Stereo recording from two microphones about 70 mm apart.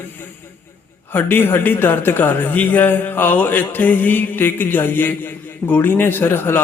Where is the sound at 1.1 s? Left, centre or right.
Left.